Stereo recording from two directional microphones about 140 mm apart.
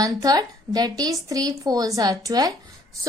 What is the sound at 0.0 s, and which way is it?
A woman's voice, 25° right (ahead or behind).